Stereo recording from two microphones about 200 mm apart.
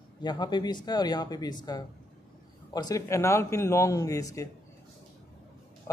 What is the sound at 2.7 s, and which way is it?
A man's voice, 15° left (ahead or behind).